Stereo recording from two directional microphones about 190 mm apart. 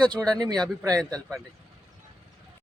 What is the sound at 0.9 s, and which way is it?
Speech, 5° left (ahead or behind).